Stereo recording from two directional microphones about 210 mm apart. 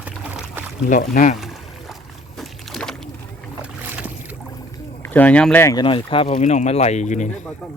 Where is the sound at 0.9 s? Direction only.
40° left (ahead or behind).